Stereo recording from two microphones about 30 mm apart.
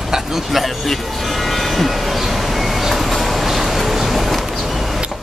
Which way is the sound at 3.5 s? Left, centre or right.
Centre.